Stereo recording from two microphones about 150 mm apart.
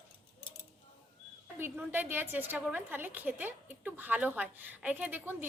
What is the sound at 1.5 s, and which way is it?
A woman's voice, 15° right (ahead or behind).